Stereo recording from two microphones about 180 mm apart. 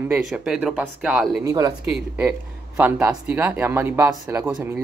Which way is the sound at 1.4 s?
20° right (ahead or behind).